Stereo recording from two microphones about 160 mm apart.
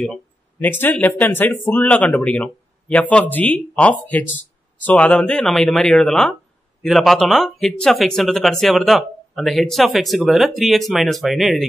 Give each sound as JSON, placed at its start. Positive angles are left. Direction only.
{"t": 0.0, "sound": "speech", "side_deg": 10}